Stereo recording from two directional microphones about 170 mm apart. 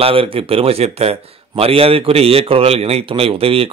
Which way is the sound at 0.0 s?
35° right (ahead or behind).